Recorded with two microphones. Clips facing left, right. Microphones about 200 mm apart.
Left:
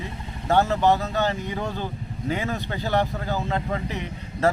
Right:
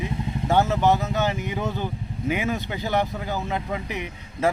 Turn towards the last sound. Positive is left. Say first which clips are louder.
# left 1 dB
turn(degrees=-15)  # may be behind; listen again after turning